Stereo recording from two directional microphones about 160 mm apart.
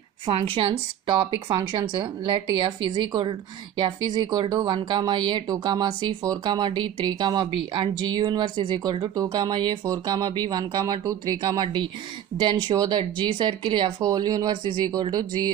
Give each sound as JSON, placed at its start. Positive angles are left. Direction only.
{"t": 0.3, "sound": "a woman's voice", "side_deg": -35}